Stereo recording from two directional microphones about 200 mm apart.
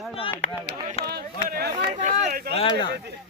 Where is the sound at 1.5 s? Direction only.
50° right (ahead or behind).